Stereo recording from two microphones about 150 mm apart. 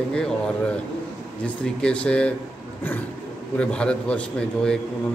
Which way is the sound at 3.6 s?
5° left (ahead or behind).